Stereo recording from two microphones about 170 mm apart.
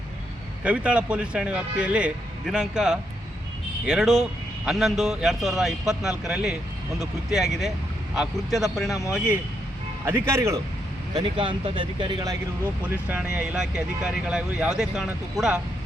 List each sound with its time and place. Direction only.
0.6 s a man's voice: 5° right (ahead or behind)
10.1 s a man's voice: 15° right (ahead or behind)
11.1 s speech: 30° right (ahead or behind)
12.9 s speech: 10° right (ahead or behind)